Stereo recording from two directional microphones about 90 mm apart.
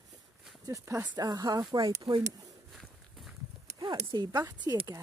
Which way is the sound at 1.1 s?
45° right (ahead or behind).